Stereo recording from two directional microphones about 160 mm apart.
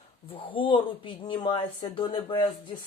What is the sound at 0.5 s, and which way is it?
Speech, 30° left (ahead or behind).